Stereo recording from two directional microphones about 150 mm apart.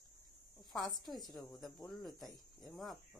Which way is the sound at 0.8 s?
25° left (ahead or behind).